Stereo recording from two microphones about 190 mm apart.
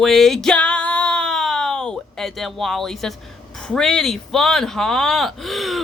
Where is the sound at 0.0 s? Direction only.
Centre (ahead or behind).